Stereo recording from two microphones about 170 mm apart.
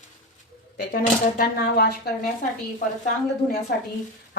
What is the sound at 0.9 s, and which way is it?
Speech, 65° left (ahead or behind).